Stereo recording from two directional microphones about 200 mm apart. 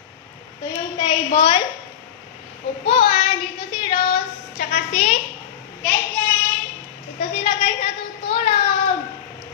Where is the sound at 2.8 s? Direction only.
30° left (ahead or behind).